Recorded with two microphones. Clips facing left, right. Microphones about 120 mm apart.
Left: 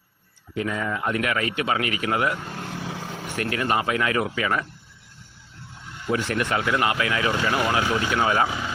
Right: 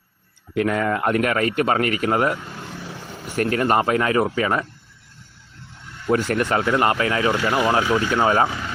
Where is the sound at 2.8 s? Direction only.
90° left.